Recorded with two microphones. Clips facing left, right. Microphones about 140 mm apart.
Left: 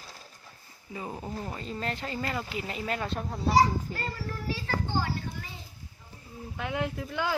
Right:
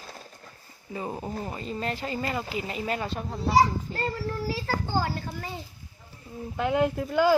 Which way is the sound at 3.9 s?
30° right (ahead or behind).